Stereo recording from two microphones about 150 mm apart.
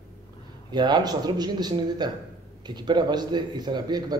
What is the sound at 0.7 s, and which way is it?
A man's voice, 30° right (ahead or behind).